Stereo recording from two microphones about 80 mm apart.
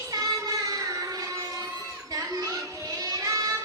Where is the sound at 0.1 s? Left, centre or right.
Right.